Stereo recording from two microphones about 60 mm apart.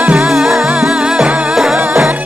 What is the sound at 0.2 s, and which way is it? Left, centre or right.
Music, centre.